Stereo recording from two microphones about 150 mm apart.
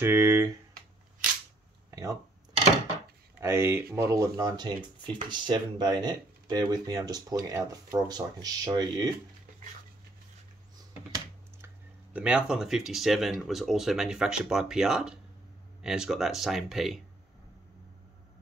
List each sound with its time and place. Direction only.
0.0 s speech: 15° right (ahead or behind)
1.9 s a sound: 20° right (ahead or behind)
3.3 s speech: 15° right (ahead or behind)
11.6 s speech: 10° right (ahead or behind)